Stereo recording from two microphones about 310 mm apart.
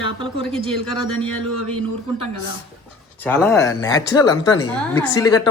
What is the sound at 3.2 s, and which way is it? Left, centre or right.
A woman's voice, centre.